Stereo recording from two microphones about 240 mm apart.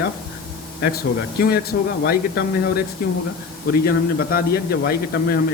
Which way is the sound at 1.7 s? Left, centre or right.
Left.